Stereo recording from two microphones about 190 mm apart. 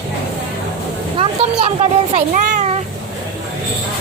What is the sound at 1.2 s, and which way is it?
A child's voice, 30° right (ahead or behind).